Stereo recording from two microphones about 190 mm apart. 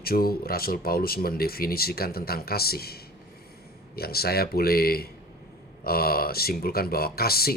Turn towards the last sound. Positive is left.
turn(degrees=55)  # may be behind; listen again after turning